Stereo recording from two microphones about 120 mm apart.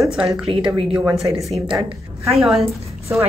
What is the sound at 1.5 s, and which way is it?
A woman's voice, centre (ahead or behind).